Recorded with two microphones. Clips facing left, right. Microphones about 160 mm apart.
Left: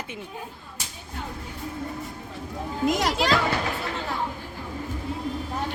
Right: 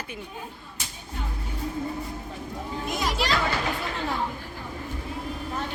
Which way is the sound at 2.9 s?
90° left.